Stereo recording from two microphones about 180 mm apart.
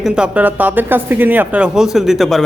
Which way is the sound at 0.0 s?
5° right (ahead or behind).